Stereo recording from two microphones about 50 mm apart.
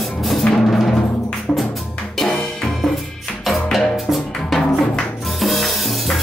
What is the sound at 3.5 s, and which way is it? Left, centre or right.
Music, centre.